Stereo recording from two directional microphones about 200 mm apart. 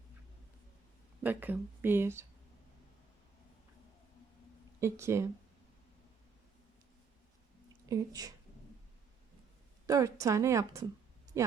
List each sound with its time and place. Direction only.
1.2 s a woman's voice: 10° right (ahead or behind)
4.8 s a woman's voice: 15° right (ahead or behind)
7.9 s a woman's voice: 20° right (ahead or behind)
9.8 s a woman's voice: 15° right (ahead or behind)